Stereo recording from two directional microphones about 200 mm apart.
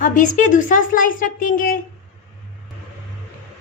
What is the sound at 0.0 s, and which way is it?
Speech, 40° left (ahead or behind).